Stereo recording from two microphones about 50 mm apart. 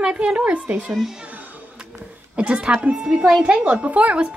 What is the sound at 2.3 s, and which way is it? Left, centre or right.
A woman's voice, right.